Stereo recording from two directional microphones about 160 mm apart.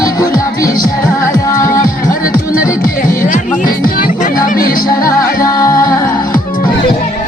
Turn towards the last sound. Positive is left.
turn(degrees=20)  # may be behind; listen again after turning